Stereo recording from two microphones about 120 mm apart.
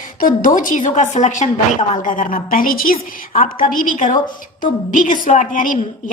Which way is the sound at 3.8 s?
90° left.